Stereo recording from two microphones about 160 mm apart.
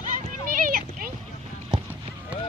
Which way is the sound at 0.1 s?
60° right (ahead or behind).